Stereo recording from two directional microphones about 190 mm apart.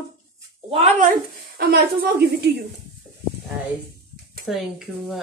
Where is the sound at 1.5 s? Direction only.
55° right (ahead or behind).